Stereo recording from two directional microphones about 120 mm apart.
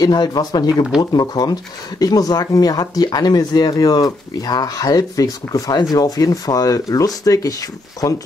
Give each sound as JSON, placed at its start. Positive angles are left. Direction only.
{"t": 0.0, "sound": "speech", "side_deg": 35}